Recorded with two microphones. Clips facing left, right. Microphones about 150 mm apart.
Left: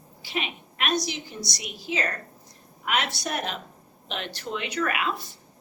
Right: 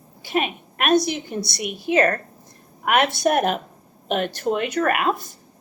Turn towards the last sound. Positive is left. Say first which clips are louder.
# right 7 dB
turn(degrees=-50)  # may be behind; listen again after turning